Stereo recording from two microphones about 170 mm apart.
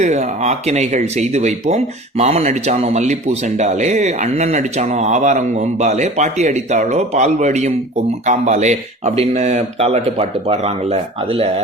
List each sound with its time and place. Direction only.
0.0 s speech: 40° right (ahead or behind)